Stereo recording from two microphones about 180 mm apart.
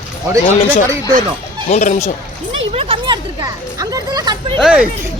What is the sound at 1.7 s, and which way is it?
Speech, 40° left (ahead or behind).